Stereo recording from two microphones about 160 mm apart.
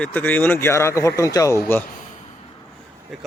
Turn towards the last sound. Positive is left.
turn(degrees=0)  # may be behind; listen again after turning